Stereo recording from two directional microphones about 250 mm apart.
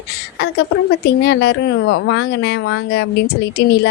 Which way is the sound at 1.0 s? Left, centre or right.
Left.